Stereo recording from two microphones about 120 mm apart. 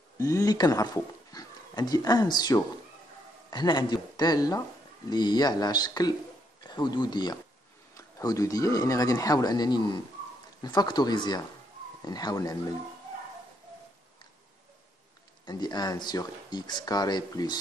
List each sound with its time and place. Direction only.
0.2 s a man's voice: 25° left (ahead or behind)
15.4 s speech: 35° left (ahead or behind)